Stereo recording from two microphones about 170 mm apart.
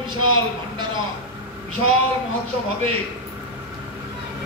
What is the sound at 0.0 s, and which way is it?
Speech, 30° right (ahead or behind).